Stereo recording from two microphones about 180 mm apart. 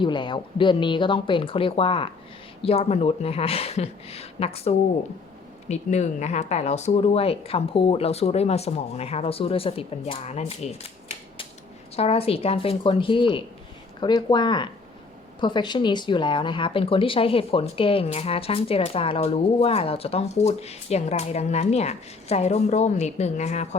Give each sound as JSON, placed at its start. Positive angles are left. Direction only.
{"t": 0.0, "sound": "speech", "side_deg": 25}
{"t": 11.9, "sound": "speech", "side_deg": 35}